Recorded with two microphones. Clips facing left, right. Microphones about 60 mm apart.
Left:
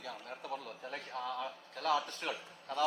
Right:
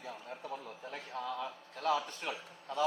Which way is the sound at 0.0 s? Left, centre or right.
Left.